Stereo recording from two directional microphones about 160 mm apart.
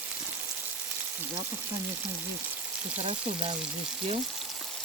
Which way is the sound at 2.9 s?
40° right (ahead or behind).